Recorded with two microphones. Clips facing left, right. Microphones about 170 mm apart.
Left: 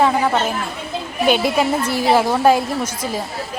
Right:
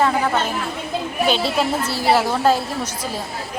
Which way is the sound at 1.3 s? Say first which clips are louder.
Left 5 dB; 10° left (ahead or behind).